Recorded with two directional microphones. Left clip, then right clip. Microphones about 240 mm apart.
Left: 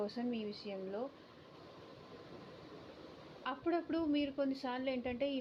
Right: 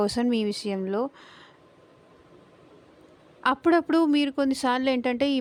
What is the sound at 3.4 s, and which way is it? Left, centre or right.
Speech, right.